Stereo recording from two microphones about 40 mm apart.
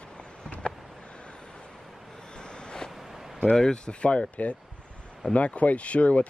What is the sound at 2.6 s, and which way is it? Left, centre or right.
Waves, centre.